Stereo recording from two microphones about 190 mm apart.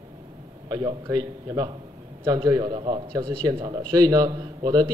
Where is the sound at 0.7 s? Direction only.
20° right (ahead or behind).